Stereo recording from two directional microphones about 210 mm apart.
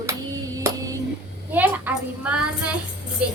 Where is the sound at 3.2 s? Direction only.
5° right (ahead or behind).